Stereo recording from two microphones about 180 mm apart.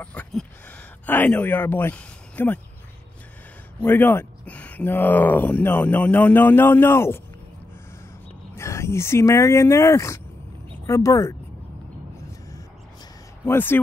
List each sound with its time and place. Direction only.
0.0 s speech: 10° left (ahead or behind)
3.8 s speech: 10° left (ahead or behind)
8.5 s speech: 15° left (ahead or behind)
13.5 s speech: 10° left (ahead or behind)